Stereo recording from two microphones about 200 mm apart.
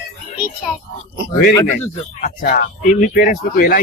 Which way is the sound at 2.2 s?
45° left (ahead or behind).